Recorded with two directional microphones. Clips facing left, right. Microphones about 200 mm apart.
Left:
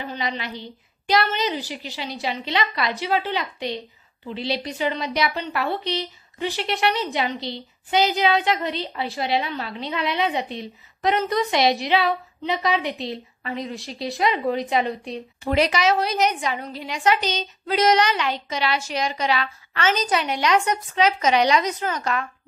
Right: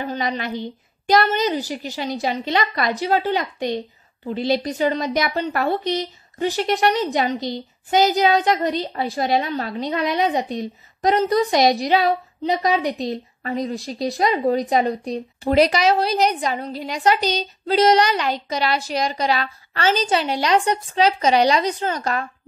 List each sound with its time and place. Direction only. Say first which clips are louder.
0.0 s a woman's voice: right 4 dB; 45° right (ahead or behind)